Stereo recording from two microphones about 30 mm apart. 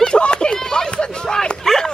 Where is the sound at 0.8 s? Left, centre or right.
Left.